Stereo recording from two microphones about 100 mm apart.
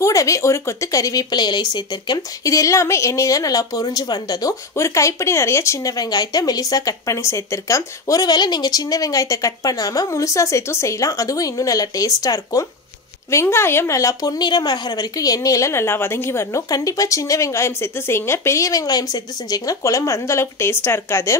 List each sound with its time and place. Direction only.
0.0 s speech: 35° left (ahead or behind)
13.3 s speech: 25° left (ahead or behind)